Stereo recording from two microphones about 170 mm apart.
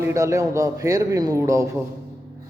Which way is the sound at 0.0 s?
15° right (ahead or behind).